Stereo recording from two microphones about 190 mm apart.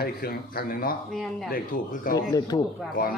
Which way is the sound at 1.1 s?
Centre (ahead or behind).